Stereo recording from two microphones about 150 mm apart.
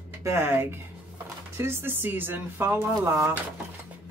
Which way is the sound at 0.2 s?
15° right (ahead or behind).